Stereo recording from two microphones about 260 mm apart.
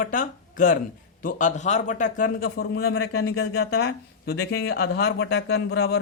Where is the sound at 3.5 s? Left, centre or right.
Left.